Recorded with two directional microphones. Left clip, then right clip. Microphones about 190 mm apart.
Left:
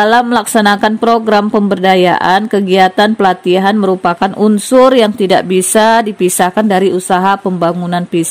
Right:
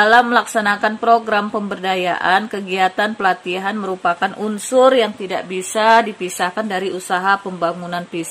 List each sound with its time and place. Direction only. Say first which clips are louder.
0.0 s a woman's voice: left 2 dB; 45° left (ahead or behind)